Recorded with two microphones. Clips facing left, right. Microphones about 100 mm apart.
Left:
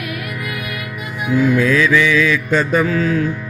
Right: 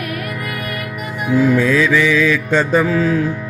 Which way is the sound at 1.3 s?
35° right (ahead or behind).